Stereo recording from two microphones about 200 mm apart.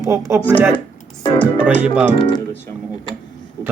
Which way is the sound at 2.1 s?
25° left (ahead or behind).